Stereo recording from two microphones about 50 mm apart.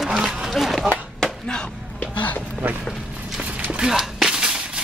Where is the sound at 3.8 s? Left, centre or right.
Centre.